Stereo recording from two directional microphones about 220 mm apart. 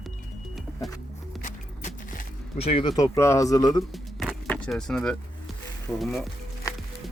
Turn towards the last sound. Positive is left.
turn(degrees=15)  # may be behind; listen again after turning